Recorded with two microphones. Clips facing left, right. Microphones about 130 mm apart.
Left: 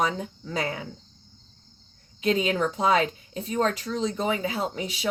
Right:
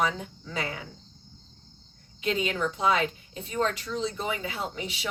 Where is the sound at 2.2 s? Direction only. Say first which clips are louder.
Left 4 dB; 40° left (ahead or behind).